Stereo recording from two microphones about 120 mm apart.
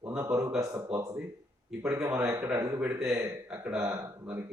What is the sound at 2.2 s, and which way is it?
Speech, 25° right (ahead or behind).